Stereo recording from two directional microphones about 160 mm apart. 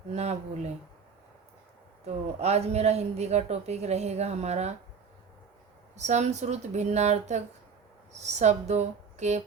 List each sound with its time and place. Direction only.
0.1 s a woman's voice: 45° right (ahead or behind)
2.0 s a woman's voice: 40° right (ahead or behind)
6.0 s a woman's voice: 45° right (ahead or behind)